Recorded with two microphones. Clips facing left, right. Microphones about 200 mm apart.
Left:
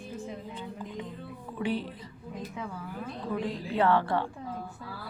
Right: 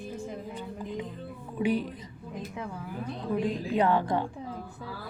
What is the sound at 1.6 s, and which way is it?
Speech, 15° right (ahead or behind).